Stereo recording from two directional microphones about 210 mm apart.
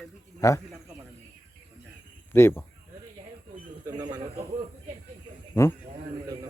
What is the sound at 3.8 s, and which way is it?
Speech, 20° right (ahead or behind).